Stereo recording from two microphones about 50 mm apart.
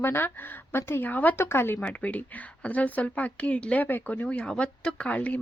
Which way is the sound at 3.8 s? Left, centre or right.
Left.